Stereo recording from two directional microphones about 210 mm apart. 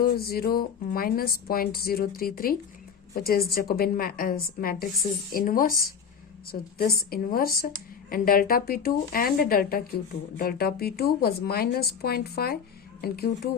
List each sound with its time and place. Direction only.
0.0 s speech: 45° left (ahead or behind)